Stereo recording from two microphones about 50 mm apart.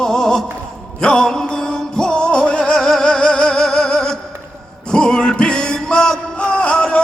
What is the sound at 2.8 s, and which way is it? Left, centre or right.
Music, centre.